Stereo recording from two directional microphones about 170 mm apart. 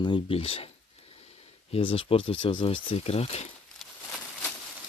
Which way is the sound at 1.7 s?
35° left (ahead or behind).